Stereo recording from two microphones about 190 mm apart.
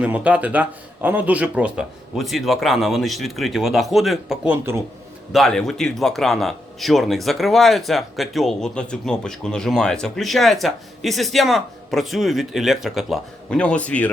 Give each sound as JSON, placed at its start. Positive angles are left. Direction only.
{"t": 0.0, "sound": "a man's voice", "side_deg": -5}